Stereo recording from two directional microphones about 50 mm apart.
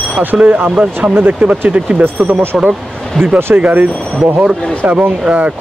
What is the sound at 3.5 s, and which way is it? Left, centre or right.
Speech, right.